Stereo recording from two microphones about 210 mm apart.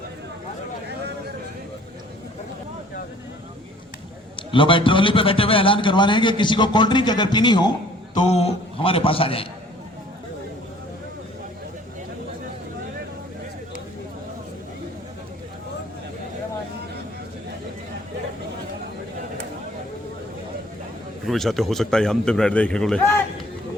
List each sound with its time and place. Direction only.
4.4 s a man's voice: 25° left (ahead or behind)
21.2 s a man's voice: centre (ahead or behind)